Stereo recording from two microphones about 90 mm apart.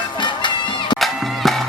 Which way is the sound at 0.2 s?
60° left (ahead or behind).